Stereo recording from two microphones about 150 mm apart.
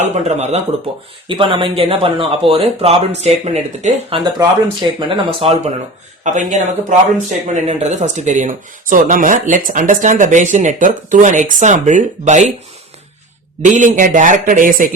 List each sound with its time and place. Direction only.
0.0 s speech: 45° right (ahead or behind)
1.3 s speech: 35° right (ahead or behind)
4.2 s speech: 30° right (ahead or behind)
6.2 s speech: 55° right (ahead or behind)
13.7 s speech: 55° right (ahead or behind)